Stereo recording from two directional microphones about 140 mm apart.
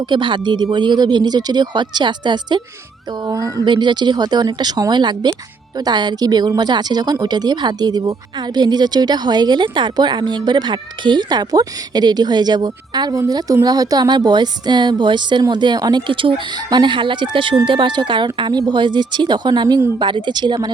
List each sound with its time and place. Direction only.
0.0 s a woman's voice: 35° right (ahead or behind)